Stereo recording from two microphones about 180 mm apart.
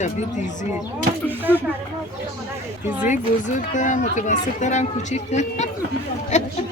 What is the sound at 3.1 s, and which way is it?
A woman's voice, 45° left (ahead or behind).